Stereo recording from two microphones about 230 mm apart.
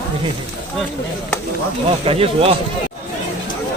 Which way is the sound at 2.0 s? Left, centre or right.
Right.